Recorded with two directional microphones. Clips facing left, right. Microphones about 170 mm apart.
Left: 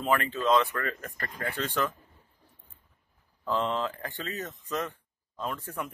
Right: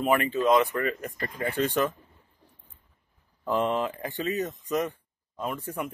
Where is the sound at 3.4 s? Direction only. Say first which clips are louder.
Right 3 dB; 15° right (ahead or behind).